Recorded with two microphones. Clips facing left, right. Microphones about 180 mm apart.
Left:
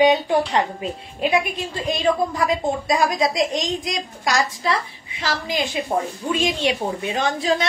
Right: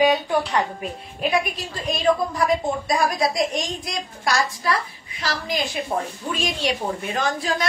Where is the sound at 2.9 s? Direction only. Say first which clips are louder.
Left 1 dB; 20° left (ahead or behind).